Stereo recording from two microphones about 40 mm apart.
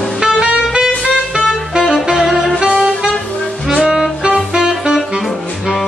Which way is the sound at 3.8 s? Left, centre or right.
Centre.